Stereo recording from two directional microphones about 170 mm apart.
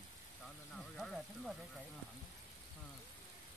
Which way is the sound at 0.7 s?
Centre (ahead or behind).